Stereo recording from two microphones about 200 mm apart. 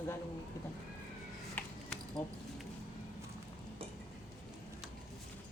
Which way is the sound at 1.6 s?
10° left (ahead or behind).